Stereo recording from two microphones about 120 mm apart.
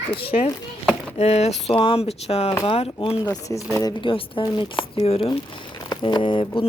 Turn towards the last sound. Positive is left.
turn(degrees=45)  # may be behind; listen again after turning